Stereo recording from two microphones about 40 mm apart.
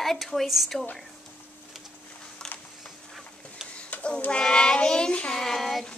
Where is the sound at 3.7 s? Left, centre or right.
Left.